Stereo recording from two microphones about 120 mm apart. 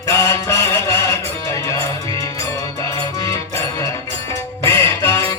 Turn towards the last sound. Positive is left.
turn(degrees=25)  # may be behind; listen again after turning